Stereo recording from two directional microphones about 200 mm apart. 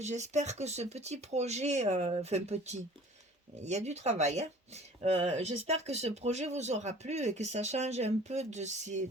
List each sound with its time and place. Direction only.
0.0 s speech: 35° right (ahead or behind)